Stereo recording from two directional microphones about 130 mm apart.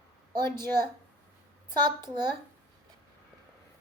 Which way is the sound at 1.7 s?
35° right (ahead or behind).